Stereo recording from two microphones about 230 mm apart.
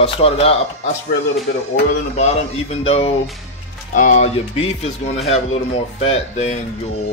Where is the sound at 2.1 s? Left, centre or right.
Left.